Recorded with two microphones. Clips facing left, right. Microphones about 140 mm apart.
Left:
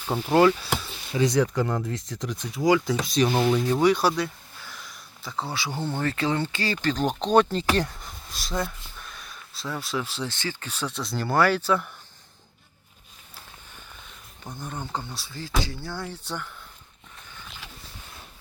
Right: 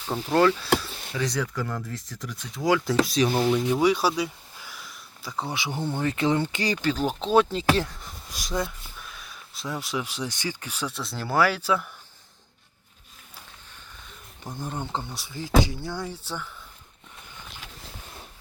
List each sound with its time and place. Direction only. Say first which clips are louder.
0.1 s speech: left 2 dB; 15° left (ahead or behind)
2.6 s speech: even; centre (ahead or behind)
3.3 s speech: even; 10° left (ahead or behind)
3.7 s a sound: left 1 dB; 5° right (ahead or behind)
5.5 s speech: right 1 dB; 20° right (ahead or behind); by 8.1 s centre (ahead or behind)
8.3 s speech: right 1 dB; 15° right (ahead or behind)
8.6 s a sound: left 1 dB; 5° right (ahead or behind)
9.6 s speech: even; 15° right (ahead or behind)
14.5 s speech: right 2 dB; 25° right (ahead or behind); by 16.5 s 10° right (ahead or behind)